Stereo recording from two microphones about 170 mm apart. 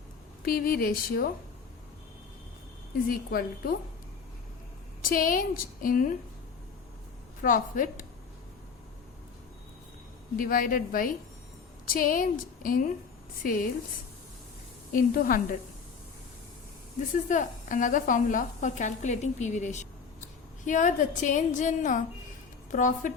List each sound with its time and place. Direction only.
0.4 s a woman's voice: 60° left (ahead or behind)
3.1 s a woman's voice: 60° left (ahead or behind)
5.0 s a woman's voice: 55° left (ahead or behind)
7.4 s a woman's voice: 55° left (ahead or behind)
10.3 s a woman's voice: 55° left (ahead or behind)
14.9 s a woman's voice: 55° left (ahead or behind)
17.1 s a woman's voice: 50° left (ahead or behind)